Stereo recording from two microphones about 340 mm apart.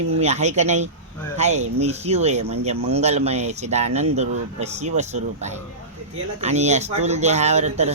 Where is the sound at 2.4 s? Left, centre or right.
Right.